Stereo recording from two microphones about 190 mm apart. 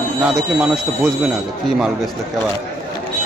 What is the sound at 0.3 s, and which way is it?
Speech, 5° right (ahead or behind).